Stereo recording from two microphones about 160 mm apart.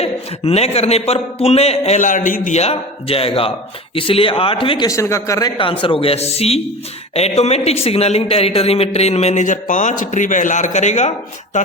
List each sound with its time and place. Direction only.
0.0 s a man's voice: 40° left (ahead or behind)
4.9 s a man's voice: 20° left (ahead or behind); by 11.1 s 45° left (ahead or behind)